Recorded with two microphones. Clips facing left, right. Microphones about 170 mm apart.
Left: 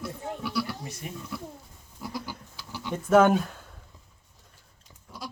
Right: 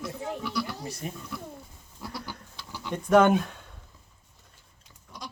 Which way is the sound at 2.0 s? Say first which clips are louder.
Left 3 dB; 10° left (ahead or behind).